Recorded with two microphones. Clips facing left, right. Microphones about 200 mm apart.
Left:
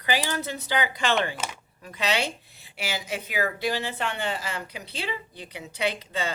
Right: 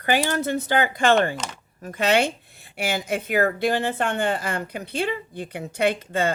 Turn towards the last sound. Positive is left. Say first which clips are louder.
# right 7 dB
turn(degrees=-50)  # may be behind; listen again after turning